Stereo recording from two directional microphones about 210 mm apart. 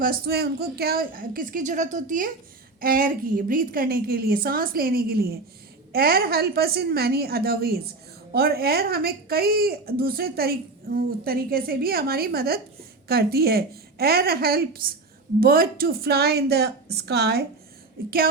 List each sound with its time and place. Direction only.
0.0 s speech: 45° right (ahead or behind)